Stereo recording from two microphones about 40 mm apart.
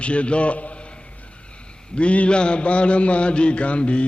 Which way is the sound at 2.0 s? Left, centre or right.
Left.